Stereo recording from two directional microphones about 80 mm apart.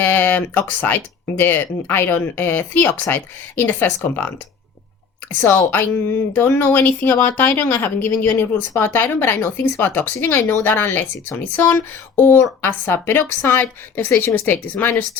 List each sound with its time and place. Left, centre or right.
0.0 s speech: left